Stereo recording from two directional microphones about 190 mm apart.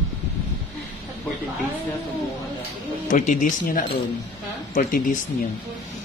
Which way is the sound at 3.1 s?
40° left (ahead or behind).